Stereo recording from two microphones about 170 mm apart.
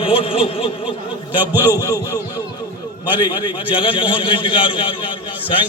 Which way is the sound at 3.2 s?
25° left (ahead or behind).